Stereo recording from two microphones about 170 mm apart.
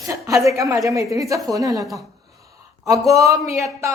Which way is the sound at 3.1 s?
20° right (ahead or behind).